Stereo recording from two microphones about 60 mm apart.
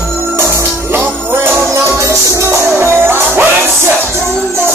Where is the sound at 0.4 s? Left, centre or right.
Right.